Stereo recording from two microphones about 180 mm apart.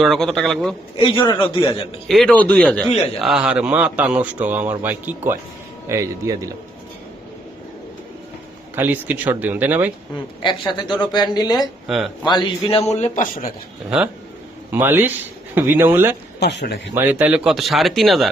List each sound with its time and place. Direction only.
0.0 s speech: centre (ahead or behind)
0.9 s speech: 30° left (ahead or behind)
2.0 s speech: centre (ahead or behind)
2.9 s a man's voice: 35° left (ahead or behind)
3.2 s a man's voice: 5° right (ahead or behind); by 6.5 s 20° right (ahead or behind)
8.7 s a man's voice: 10° right (ahead or behind)
10.4 s speech: 25° left (ahead or behind)
11.9 s speech: centre (ahead or behind)
12.2 s a man's voice: 25° left (ahead or behind); by 13.5 s 50° left (ahead or behind)
14.7 s a man's voice: 10° right (ahead or behind)
16.4 s speech: 70° left (ahead or behind)
16.9 s speech: 10° right (ahead or behind)